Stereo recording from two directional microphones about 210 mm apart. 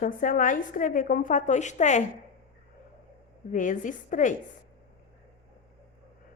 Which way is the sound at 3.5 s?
40° left (ahead or behind).